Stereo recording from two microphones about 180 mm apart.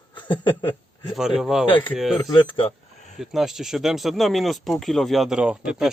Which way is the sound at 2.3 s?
30° left (ahead or behind).